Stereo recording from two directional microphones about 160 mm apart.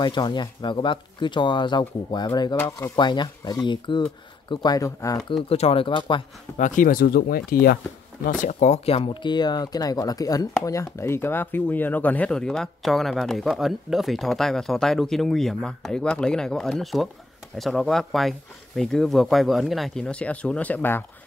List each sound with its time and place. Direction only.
0.0 s speech: 30° left (ahead or behind)
5.5 s speech: 35° left (ahead or behind)
6.6 s speech: 55° left (ahead or behind)
8.5 s speech: 45° left (ahead or behind); by 21.0 s 10° left (ahead or behind)